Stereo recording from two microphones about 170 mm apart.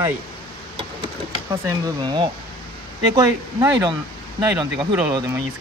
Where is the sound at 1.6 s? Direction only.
25° right (ahead or behind).